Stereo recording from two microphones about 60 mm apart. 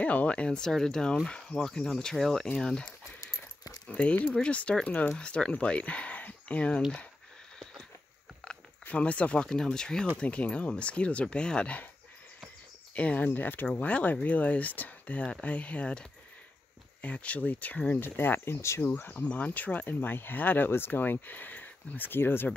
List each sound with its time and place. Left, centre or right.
0.0 s speech: left
8.4 s a sound: centre
8.8 s speech: left
12.9 s speech: left
17.9 s speech: left
18.8 s speech: left